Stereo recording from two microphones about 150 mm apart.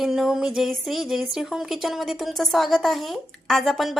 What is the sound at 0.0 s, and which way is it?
Speech, 5° right (ahead or behind).